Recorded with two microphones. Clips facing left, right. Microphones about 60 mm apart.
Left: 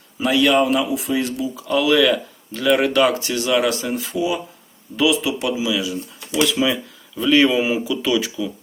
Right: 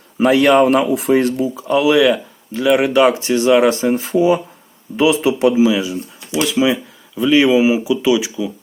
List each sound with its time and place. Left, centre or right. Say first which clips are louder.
0.2 s speech: right 5 dB; right
1.5 s speech: right 3 dB; right